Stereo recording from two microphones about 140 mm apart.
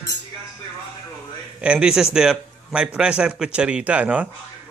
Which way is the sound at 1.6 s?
5° right (ahead or behind).